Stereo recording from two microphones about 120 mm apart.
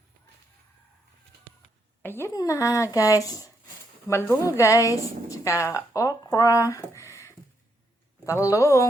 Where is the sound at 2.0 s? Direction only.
20° left (ahead or behind).